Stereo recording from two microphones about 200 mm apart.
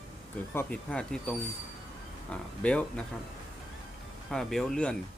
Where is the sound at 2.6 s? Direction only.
5° left (ahead or behind).